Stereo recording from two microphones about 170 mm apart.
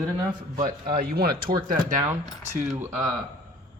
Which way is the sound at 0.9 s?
65° right (ahead or behind).